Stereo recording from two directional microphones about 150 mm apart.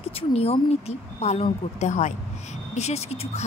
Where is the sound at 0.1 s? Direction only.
40° left (ahead or behind).